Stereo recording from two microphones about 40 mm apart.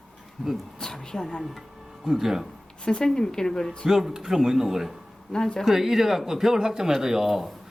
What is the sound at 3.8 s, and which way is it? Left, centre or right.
Speech, centre.